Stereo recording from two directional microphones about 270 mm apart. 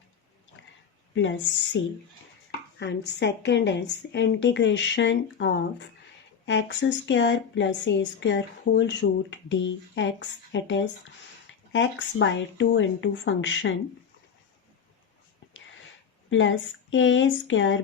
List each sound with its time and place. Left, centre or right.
1.1 s a woman's voice: left
16.3 s speech: left